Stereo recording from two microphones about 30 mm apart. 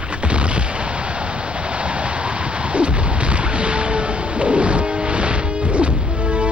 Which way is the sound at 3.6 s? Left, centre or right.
Right.